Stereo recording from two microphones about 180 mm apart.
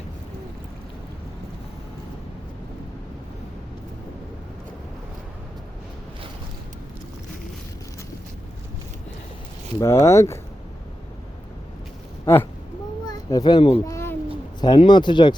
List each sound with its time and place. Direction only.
9.8 s speech: 15° left (ahead or behind)
12.2 s speech: 15° left (ahead or behind)
13.8 s a sound: 15° left (ahead or behind)
14.6 s speech: 25° left (ahead or behind)